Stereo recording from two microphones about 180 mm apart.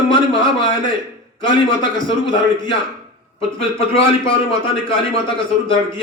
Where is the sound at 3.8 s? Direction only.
30° left (ahead or behind).